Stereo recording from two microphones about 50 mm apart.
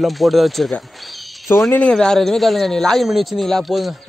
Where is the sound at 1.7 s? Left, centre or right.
Centre.